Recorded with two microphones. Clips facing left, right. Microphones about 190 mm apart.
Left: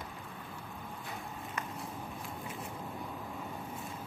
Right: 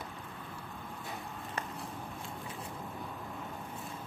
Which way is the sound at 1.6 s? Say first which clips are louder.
Right 1 dB; 35° right (ahead or behind).